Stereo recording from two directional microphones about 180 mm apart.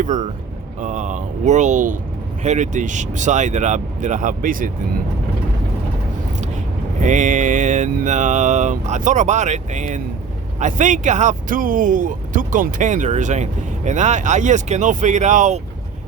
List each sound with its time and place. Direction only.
0.0 s speech: 45° right (ahead or behind)
7.0 s speech: 45° right (ahead or behind)